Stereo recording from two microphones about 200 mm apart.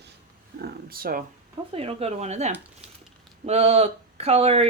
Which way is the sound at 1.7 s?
30° right (ahead or behind).